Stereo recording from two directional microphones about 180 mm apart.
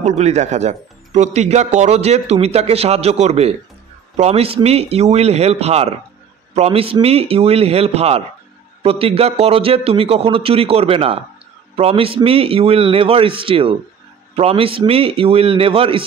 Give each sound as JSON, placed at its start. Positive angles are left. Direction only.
{"t": 0.0, "sound": "speech", "side_deg": -40}